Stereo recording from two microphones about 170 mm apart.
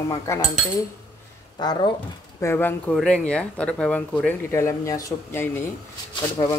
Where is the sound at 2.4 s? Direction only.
15° left (ahead or behind).